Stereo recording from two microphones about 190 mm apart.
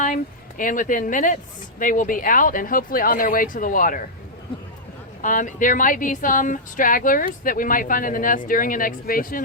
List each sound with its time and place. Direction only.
0.0 s speech: 45° left (ahead or behind)
5.2 s speech: 45° left (ahead or behind)